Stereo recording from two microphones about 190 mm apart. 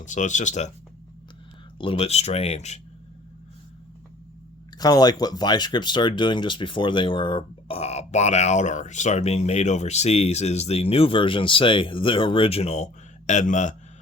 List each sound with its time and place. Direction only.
0.0 s speech: 40° left (ahead or behind)
1.8 s speech: 30° left (ahead or behind)
4.8 s speech: 20° left (ahead or behind); by 13.7 s 40° left (ahead or behind)